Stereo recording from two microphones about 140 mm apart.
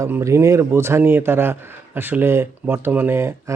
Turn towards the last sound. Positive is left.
turn(degrees=-20)  # may be behind; listen again after turning